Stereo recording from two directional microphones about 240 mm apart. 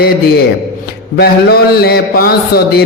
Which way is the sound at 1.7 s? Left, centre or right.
Left.